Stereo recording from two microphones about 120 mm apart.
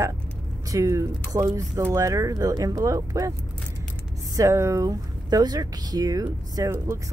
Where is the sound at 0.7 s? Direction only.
25° right (ahead or behind).